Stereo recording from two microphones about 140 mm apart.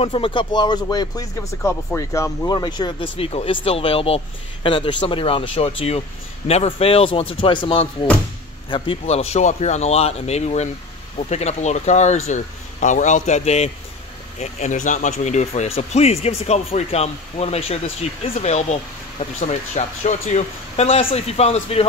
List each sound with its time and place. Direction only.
0.0 s a man's voice: 40° left (ahead or behind)
9.0 s speech: 50° left (ahead or behind)